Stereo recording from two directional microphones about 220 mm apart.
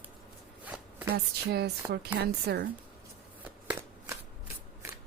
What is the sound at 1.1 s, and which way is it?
Speech, 45° right (ahead or behind).